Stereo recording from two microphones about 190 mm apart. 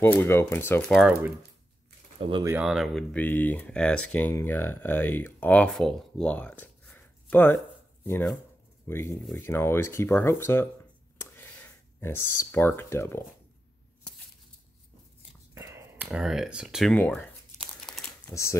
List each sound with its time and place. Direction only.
0.0 s speech: 10° left (ahead or behind)
0.9 s speech: 5° right (ahead or behind)
2.1 s speech: 30° right (ahead or behind)
2.4 s speech: 5° right (ahead or behind); by 10.7 s 10° left (ahead or behind)
11.1 s a sound: 10° left (ahead or behind)
15.5 s whispering: 15° right (ahead or behind)
16.1 s speech: centre (ahead or behind)
17.7 s crumpling: centre (ahead or behind)
18.3 s speech: 15° left (ahead or behind)